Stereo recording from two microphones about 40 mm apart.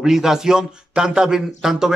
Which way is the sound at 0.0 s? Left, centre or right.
Centre.